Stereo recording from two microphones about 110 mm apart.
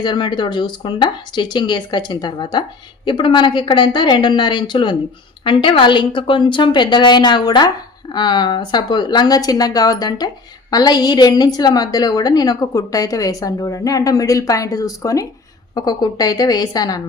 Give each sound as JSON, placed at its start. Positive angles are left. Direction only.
{"t": 0.0, "sound": "a woman's voice", "side_deg": 45}